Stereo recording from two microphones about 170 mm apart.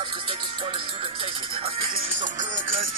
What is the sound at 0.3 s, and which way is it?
Music, 30° right (ahead or behind).